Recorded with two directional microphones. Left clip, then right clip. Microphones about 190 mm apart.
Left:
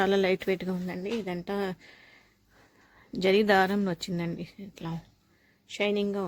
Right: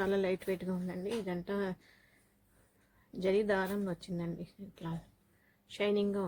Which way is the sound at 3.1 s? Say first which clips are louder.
Left 9 dB; 45° left (ahead or behind).